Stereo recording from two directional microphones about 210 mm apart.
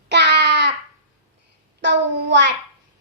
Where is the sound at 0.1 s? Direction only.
55° right (ahead or behind).